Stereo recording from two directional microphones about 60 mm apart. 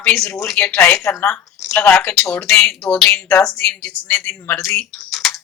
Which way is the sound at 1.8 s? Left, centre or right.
Centre.